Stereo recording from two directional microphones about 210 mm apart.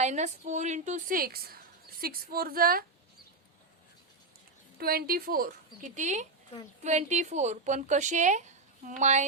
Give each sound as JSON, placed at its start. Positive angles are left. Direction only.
{"t": 0.0, "sound": "a woman's voice", "side_deg": -35}
{"t": 4.8, "sound": "a woman's voice", "side_deg": -45}